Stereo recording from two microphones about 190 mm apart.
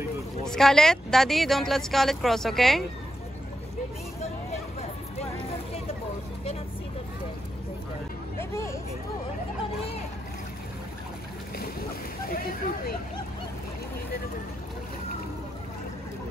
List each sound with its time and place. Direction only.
0.5 s speech: 5° left (ahead or behind)
8.4 s hubbub: 15° left (ahead or behind)
12.4 s a sound: 50° left (ahead or behind)